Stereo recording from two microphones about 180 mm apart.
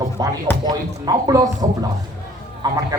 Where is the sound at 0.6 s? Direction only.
20° right (ahead or behind).